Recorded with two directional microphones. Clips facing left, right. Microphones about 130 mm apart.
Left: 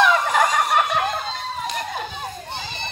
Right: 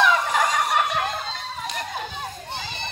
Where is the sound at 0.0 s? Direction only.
60° left (ahead or behind).